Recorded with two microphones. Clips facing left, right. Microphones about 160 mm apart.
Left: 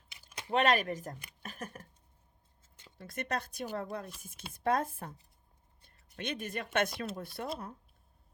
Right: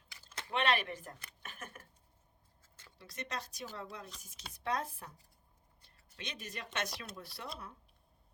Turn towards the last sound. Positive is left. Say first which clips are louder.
# left 9 dB
turn(degrees=50)  # may be behind; listen again after turning